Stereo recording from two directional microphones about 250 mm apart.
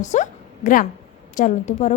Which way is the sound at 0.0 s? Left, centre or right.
Left.